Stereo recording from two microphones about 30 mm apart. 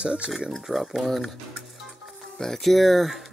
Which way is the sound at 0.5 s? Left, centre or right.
Centre.